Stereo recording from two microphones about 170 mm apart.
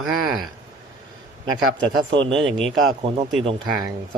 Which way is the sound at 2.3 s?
5° left (ahead or behind).